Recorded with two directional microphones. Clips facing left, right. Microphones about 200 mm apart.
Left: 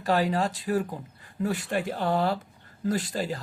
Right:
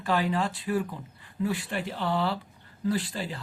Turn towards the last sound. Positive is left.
turn(degrees=45)  # may be behind; listen again after turning